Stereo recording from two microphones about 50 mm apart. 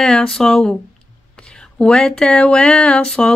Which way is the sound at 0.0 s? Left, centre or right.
Centre.